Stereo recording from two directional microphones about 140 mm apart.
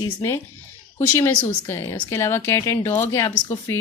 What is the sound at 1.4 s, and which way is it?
Speech, 15° left (ahead or behind).